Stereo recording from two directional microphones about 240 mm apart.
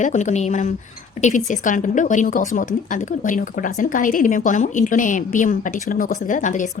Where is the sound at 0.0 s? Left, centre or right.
Left.